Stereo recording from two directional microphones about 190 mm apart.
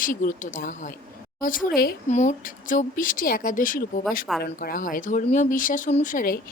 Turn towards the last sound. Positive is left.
turn(degrees=45)  # may be behind; listen again after turning